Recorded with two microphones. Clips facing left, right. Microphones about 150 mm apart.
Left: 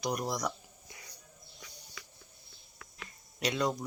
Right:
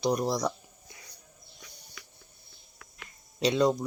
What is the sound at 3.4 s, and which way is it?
Speech, 25° right (ahead or behind).